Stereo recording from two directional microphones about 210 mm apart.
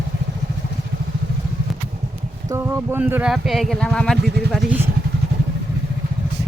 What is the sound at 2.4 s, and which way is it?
Speech, 10° right (ahead or behind).